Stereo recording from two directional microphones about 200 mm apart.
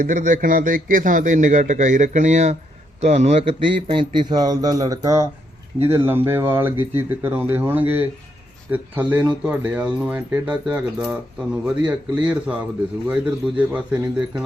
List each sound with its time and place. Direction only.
0.0 s a man's voice: 40° right (ahead or behind); by 14.4 s 5° right (ahead or behind)